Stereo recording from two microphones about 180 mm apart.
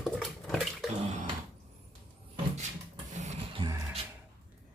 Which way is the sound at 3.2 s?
40° right (ahead or behind).